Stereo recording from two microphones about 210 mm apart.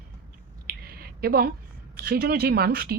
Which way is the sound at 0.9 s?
45° right (ahead or behind).